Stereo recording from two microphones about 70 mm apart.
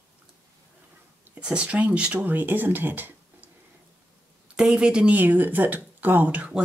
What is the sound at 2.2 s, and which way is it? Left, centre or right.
Speech, right.